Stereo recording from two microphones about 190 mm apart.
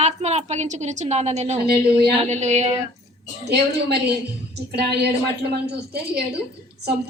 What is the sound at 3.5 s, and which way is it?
Speech, 60° right (ahead or behind).